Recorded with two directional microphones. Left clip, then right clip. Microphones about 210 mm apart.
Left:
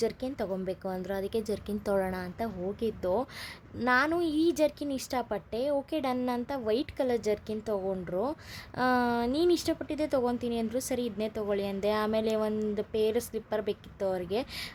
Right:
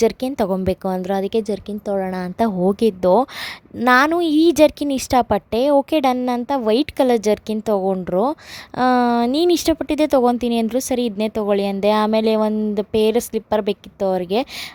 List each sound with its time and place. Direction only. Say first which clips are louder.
0.0 s a woman's voice: right 14 dB; 40° right (ahead or behind)